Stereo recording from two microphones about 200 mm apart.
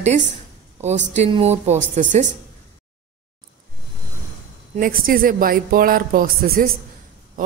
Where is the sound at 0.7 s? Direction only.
35° right (ahead or behind).